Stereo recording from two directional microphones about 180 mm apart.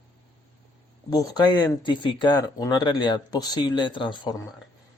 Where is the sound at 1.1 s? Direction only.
20° left (ahead or behind).